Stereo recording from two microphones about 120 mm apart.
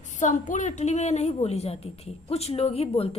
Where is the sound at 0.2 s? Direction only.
90° left.